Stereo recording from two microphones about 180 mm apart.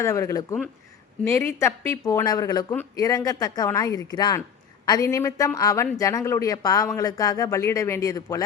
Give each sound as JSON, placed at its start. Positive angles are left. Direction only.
{"t": 0.0, "sound": "a woman's voice", "side_deg": 15}